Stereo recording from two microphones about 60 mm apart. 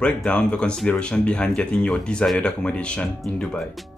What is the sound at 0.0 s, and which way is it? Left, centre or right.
Speech, centre.